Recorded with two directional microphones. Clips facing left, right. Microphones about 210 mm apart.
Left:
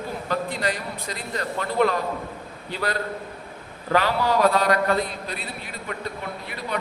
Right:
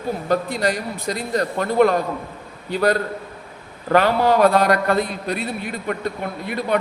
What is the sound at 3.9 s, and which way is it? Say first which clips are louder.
A man's voice: right 5 dB; 55° right (ahead or behind).